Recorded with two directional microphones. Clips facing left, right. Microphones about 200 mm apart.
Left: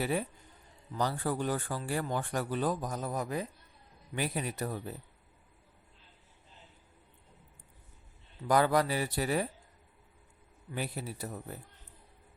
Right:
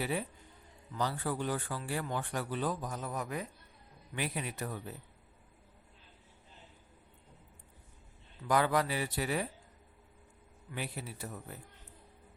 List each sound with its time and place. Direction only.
0.0 s a man's voice: 45° left (ahead or behind)
8.4 s a man's voice: 40° left (ahead or behind)
10.8 s a man's voice: 40° left (ahead or behind)